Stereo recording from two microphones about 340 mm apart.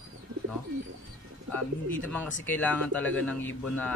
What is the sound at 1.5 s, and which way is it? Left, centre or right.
A man's voice, centre.